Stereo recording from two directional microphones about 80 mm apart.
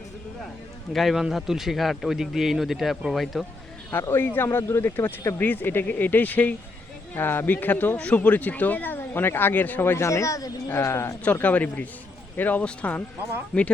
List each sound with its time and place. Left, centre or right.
0.9 s a man's voice: centre
4.0 s speech: left
10.7 s speech: left
11.2 s speech: centre